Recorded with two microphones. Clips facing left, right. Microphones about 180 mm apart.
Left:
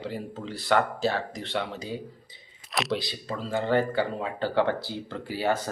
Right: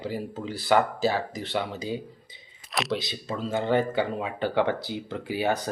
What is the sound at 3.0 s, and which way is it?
Speech, 20° right (ahead or behind).